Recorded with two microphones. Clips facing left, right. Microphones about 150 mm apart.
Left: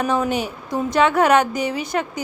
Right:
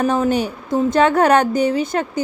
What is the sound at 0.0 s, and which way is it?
A woman's voice, 35° right (ahead or behind).